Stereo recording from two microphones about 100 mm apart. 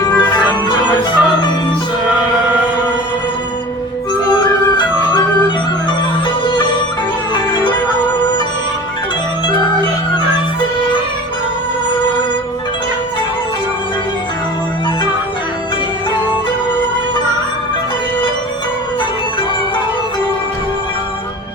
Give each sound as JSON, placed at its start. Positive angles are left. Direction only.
{"t": 0.2, "sound": "organ", "side_deg": 45}
{"t": 6.4, "sound": "music", "side_deg": 50}